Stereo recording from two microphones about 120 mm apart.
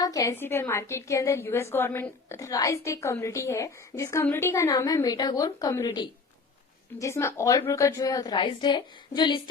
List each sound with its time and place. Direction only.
0.0 s a woman's voice: 30° left (ahead or behind)
7.0 s a woman's voice: 25° left (ahead or behind); by 9.4 s 40° left (ahead or behind)